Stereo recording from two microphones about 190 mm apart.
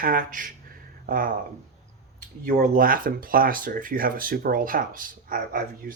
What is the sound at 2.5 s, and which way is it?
Speech, 45° right (ahead or behind).